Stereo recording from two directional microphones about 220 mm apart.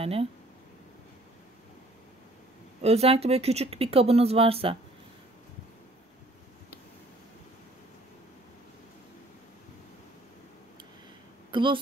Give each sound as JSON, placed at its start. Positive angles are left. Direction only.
{"t": 0.0, "sound": "speech", "side_deg": -25}
{"t": 2.8, "sound": "speech", "side_deg": -30}
{"t": 11.5, "sound": "speech", "side_deg": -20}